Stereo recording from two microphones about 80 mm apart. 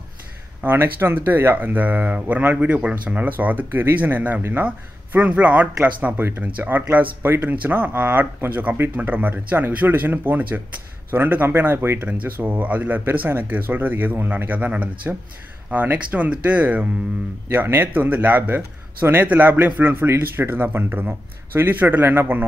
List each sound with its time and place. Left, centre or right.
0.6 s speech: right
4.6 s speech: centre